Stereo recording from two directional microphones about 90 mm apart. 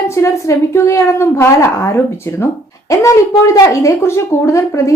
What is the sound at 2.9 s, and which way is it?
A woman's voice, 40° left (ahead or behind).